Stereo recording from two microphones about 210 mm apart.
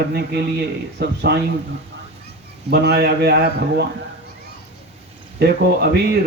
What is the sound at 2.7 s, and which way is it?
Speech, 50° right (ahead or behind).